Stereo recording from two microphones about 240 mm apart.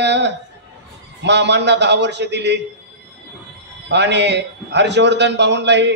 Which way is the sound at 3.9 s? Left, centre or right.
Right.